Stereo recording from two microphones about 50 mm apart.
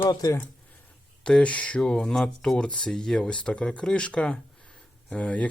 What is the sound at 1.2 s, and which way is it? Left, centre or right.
Speech, left.